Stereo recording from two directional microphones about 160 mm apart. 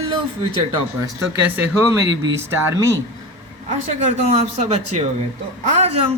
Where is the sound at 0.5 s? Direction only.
30° right (ahead or behind).